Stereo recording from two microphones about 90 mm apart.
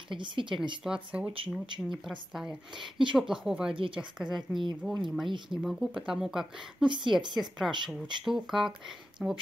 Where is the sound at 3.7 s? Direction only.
75° right (ahead or behind).